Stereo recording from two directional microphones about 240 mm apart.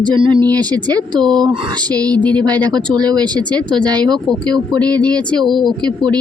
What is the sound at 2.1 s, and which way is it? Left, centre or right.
Speech, centre.